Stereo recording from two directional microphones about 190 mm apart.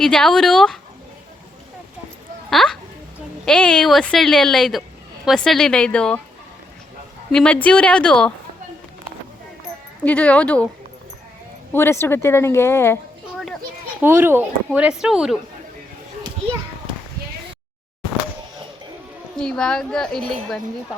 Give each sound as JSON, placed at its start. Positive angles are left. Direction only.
{"t": 0.0, "sound": "a woman's voice", "side_deg": 5}
{"t": 2.5, "sound": "a woman's voice", "side_deg": 0}
{"t": 7.3, "sound": "a woman's voice", "side_deg": 5}
{"t": 10.0, "sound": "speech", "side_deg": 5}
{"t": 11.7, "sound": "speech", "side_deg": 10}
{"t": 13.3, "sound": "children playing", "side_deg": 0}
{"t": 14.0, "sound": "speech", "side_deg": -10}
{"t": 19.4, "sound": "a woman's voice", "side_deg": 5}